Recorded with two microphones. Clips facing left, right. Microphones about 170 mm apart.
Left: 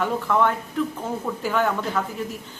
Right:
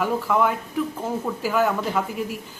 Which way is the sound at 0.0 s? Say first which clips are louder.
Even; 10° right (ahead or behind).